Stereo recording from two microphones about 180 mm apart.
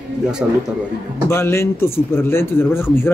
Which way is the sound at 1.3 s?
15° left (ahead or behind).